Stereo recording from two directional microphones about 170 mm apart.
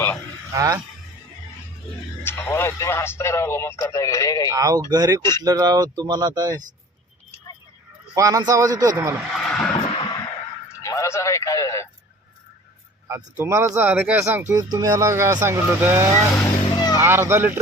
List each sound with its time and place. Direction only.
0.5 s speech: 20° right (ahead or behind)
2.2 s speech: 15° left (ahead or behind)
4.5 s speech: 20° right (ahead or behind)
8.1 s speech: 20° right (ahead or behind)
9.3 s a sound: centre (ahead or behind)
9.6 s a sound: 25° left (ahead or behind)
13.1 s speech: 15° right (ahead or behind)
16.4 s vehicle: 25° left (ahead or behind)
17.0 s speech: 15° right (ahead or behind)